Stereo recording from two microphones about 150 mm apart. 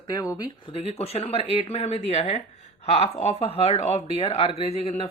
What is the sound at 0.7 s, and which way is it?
Speech, 45° left (ahead or behind).